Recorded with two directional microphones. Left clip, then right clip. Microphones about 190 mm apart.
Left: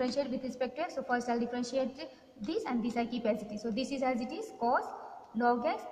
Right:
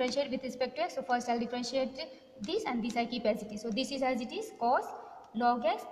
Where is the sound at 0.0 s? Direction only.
50° right (ahead or behind).